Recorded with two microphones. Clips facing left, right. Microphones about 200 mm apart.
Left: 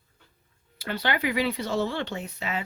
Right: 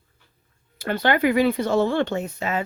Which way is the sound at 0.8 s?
50° right (ahead or behind).